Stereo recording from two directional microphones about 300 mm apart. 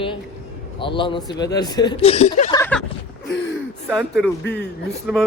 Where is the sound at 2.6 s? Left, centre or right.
Centre.